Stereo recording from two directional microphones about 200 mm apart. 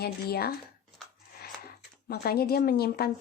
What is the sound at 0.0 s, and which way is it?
Speech, 50° left (ahead or behind).